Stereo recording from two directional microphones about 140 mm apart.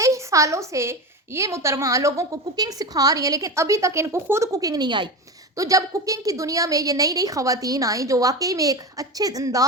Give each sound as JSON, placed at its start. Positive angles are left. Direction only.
{"t": 0.0, "sound": "a woman's voice", "side_deg": -20}